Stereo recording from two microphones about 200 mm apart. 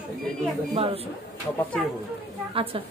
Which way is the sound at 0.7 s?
30° right (ahead or behind).